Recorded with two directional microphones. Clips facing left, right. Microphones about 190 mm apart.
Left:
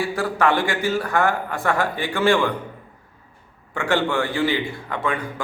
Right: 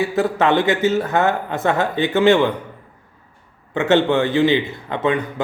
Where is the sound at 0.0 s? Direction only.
20° right (ahead or behind).